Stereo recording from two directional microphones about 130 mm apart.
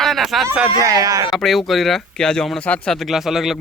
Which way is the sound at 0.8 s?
25° right (ahead or behind).